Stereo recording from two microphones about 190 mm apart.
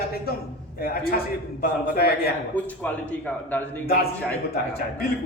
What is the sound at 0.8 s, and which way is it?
A man's voice, 55° left (ahead or behind).